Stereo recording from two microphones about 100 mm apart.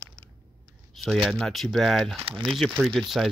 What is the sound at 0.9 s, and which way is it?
Speech, centre (ahead or behind).